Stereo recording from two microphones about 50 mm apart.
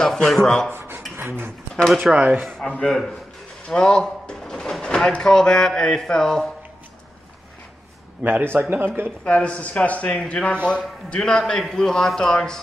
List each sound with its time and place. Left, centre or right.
0.0 s speech: centre
0.7 s rub: right
1.1 s speech: right
1.9 s speech: centre
2.1 s speech: right
3.6 s speech: centre
8.2 s a man's voice: right
9.2 s speech: left